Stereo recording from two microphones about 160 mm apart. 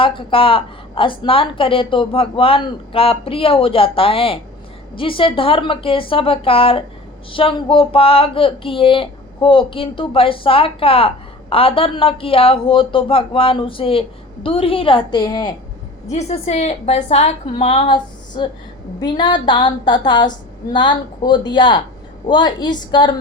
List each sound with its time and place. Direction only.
0.0 s speech: 35° left (ahead or behind)
16.0 s a woman's voice: 45° left (ahead or behind); by 23.1 s 30° left (ahead or behind)